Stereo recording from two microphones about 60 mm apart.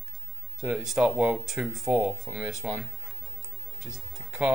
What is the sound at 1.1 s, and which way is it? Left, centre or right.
Speech, centre.